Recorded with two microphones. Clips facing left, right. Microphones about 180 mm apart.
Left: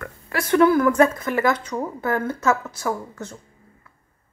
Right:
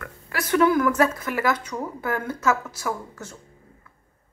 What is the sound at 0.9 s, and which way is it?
Speech, 10° right (ahead or behind).